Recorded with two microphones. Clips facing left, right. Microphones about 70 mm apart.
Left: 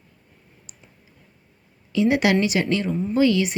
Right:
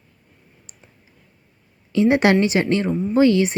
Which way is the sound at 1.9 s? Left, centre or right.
Right.